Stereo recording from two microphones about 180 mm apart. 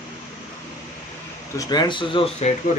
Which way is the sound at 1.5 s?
20° left (ahead or behind).